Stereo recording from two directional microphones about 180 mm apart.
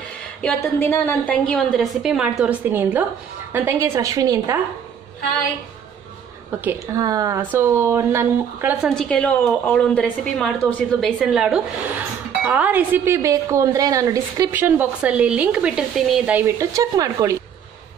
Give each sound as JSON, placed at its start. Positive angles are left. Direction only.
{"t": 0.6, "sound": "a woman's voice", "side_deg": 10}
{"t": 6.6, "sound": "a woman's voice", "side_deg": -15}
{"t": 8.8, "sound": "a woman's voice", "side_deg": 0}
{"t": 11.1, "sound": "a woman's voice", "side_deg": -5}